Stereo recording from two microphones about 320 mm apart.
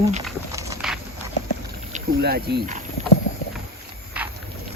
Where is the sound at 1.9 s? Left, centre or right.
Right.